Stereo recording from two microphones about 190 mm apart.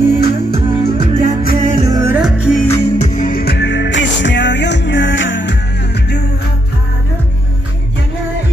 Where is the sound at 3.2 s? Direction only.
50° left (ahead or behind); by 5.5 s 70° left (ahead or behind).